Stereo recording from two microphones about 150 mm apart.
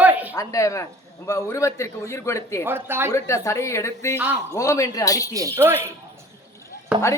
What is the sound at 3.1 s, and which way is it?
A man's voice, 20° left (ahead or behind).